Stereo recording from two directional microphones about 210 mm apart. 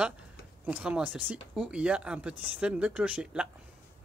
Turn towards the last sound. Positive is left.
turn(degrees=-5)  # may be behind; listen again after turning